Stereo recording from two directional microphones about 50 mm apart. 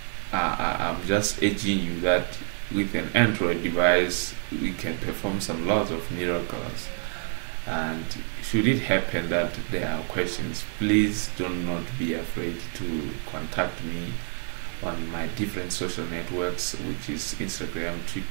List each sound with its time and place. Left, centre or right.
0.3 s speech: centre
4.5 s speech: centre
4.8 s speech: centre
7.7 s speech: centre
13.6 s speech: centre
14.8 s speech: centre